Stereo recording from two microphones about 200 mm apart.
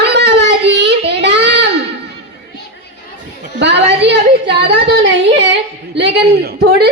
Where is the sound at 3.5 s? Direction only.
60° right (ahead or behind).